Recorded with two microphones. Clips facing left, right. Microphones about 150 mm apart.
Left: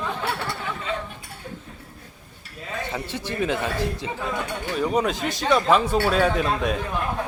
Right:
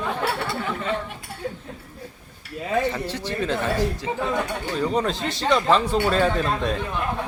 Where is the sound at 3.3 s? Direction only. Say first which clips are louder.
Even; 15° left (ahead or behind).